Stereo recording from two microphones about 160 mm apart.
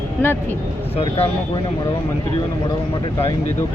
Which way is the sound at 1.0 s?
35° left (ahead or behind).